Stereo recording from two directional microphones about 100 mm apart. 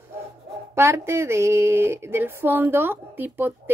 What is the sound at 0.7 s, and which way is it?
Speech, 25° right (ahead or behind).